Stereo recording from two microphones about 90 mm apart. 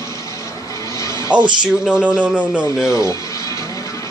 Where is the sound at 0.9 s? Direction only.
35° left (ahead or behind).